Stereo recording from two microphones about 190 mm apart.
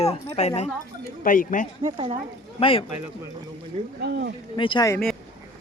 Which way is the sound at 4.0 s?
60° right (ahead or behind).